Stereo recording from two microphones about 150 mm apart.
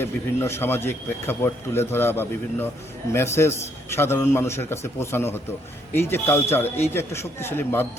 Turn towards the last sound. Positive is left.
turn(degrees=15)  # may be behind; listen again after turning